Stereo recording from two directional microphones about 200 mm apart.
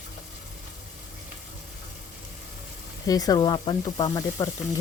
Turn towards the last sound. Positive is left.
turn(degrees=15)  # may be behind; listen again after turning